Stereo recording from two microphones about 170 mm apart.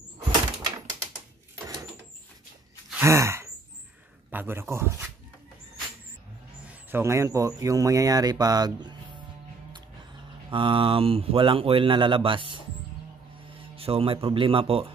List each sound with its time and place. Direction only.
0.2 s a sound: 25° right (ahead or behind)
2.9 s gasp: 15° right (ahead or behind)
4.3 s speech: 10° right (ahead or behind)
6.7 s speech: 15° right (ahead or behind)
10.5 s speech: 30° right (ahead or behind)